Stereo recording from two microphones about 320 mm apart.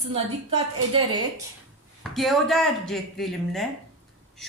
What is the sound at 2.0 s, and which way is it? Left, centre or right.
Speech, centre.